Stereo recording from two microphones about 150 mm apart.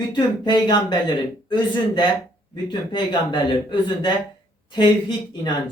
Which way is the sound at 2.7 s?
30° left (ahead or behind).